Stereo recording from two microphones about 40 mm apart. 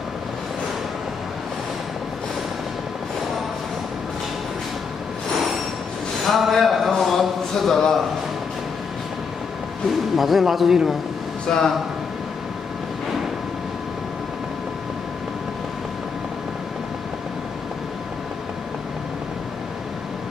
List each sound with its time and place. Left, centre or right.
6.2 s a sound: centre
10.1 s a man's voice: centre
11.4 s speech: centre